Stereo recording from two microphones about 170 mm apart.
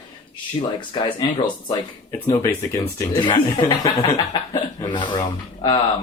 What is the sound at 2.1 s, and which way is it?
Speech, 15° left (ahead or behind).